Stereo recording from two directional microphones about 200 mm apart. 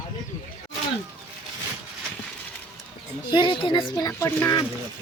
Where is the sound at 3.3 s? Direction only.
25° left (ahead or behind).